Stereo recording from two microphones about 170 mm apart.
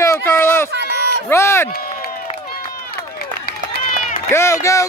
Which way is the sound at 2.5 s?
60° left (ahead or behind).